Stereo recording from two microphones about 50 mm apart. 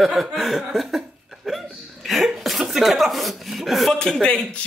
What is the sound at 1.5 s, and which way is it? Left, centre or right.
Hiccup, centre.